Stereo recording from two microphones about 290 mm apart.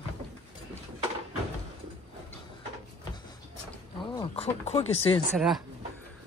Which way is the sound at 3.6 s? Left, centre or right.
Centre.